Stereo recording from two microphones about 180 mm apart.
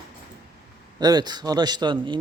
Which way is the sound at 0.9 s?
20° right (ahead or behind).